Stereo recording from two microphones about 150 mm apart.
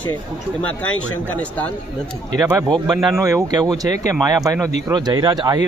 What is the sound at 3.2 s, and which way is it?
Speech, 20° right (ahead or behind).